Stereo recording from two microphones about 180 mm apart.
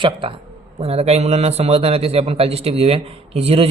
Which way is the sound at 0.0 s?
30° right (ahead or behind).